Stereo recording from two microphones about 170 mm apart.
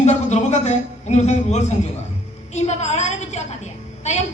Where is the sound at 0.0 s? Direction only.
40° left (ahead or behind).